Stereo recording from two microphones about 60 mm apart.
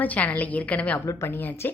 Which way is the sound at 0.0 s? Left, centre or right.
Left.